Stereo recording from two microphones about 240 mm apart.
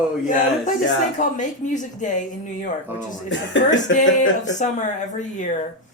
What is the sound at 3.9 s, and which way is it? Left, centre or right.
Speech, left.